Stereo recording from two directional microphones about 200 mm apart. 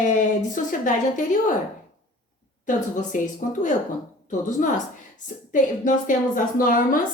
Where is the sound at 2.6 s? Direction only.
40° left (ahead or behind).